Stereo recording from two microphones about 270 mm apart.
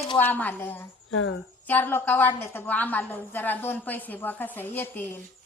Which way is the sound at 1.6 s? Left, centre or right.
Centre.